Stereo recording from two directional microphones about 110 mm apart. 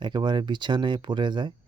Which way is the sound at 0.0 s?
45° right (ahead or behind).